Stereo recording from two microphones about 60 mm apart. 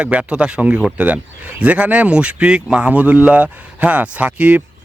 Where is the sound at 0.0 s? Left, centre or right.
Centre.